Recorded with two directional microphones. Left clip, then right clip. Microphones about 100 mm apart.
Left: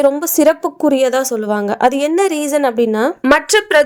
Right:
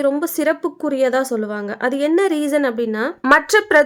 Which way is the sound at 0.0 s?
30° left (ahead or behind).